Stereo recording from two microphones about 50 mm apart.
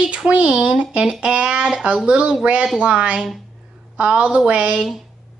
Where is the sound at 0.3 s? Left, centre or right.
Right.